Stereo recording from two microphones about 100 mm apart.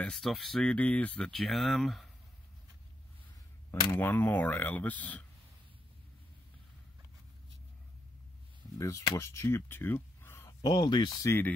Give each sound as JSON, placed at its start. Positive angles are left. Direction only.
{"t": 0.0, "sound": "speech", "side_deg": 5}
{"t": 0.7, "sound": "speech", "side_deg": 15}
{"t": 1.3, "sound": "speech", "side_deg": 0}
{"t": 3.9, "sound": "speech", "side_deg": 20}
{"t": 8.7, "sound": "speech", "side_deg": 30}
{"t": 10.6, "sound": "speech", "side_deg": 45}
{"t": 11.2, "sound": "speech", "side_deg": 20}